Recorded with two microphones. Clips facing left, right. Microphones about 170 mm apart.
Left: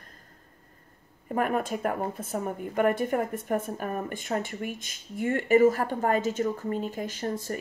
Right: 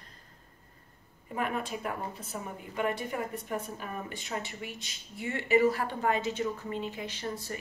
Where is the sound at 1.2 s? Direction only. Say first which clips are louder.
Left 6 dB; 50° left (ahead or behind).